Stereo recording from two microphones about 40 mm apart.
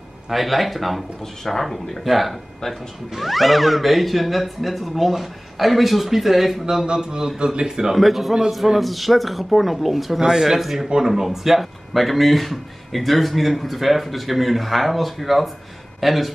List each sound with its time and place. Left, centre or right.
0.3 s speech: centre
7.1 s speech: centre
7.9 s speech: centre